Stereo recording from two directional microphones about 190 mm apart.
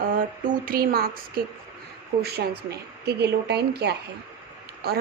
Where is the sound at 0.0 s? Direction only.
45° right (ahead or behind).